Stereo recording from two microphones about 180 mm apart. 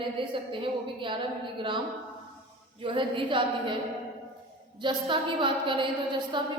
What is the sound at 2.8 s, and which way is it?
Speech, 30° right (ahead or behind).